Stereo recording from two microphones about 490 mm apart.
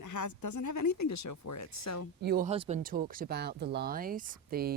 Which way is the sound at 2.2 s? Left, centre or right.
Centre.